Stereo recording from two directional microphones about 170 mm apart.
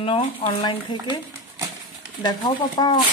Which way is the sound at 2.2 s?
25° left (ahead or behind).